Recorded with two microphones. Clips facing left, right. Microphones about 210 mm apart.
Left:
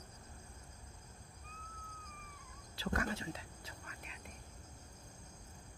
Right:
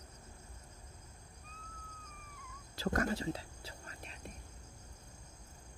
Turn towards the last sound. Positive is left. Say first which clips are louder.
# right 2 dB
turn(degrees=-35)  # may be behind; listen again after turning